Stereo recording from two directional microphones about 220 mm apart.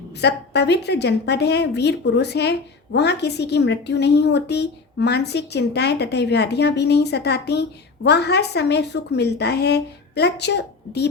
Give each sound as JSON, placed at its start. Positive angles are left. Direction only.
{"t": 0.1, "sound": "a woman's voice", "side_deg": 50}